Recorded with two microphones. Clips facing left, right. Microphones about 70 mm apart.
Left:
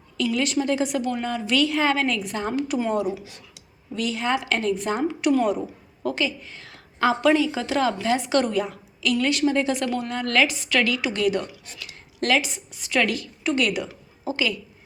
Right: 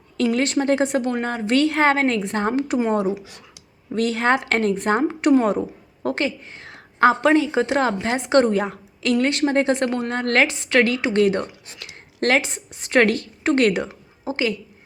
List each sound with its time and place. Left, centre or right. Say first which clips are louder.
0.2 s a woman's voice: right 3 dB; right
3.9 s a woman's voice: right 5 dB; right